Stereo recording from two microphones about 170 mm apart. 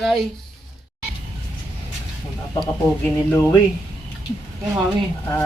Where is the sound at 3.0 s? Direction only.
15° left (ahead or behind).